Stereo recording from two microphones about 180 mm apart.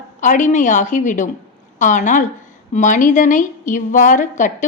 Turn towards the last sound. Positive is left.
turn(degrees=45)  # may be behind; listen again after turning